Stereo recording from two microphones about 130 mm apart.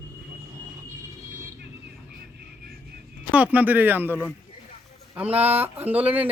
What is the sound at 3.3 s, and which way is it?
Speech, 10° right (ahead or behind).